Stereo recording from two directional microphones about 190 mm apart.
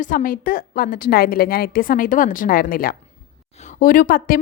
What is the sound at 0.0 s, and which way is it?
A woman's voice, 45° left (ahead or behind).